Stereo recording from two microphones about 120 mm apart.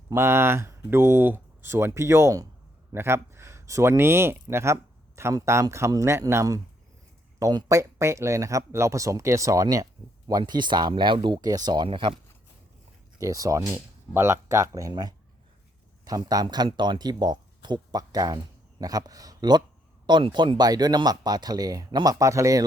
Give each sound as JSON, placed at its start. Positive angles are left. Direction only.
{"t": 0.1, "sound": "speech", "side_deg": -20}
{"t": 13.1, "sound": "speech", "side_deg": -30}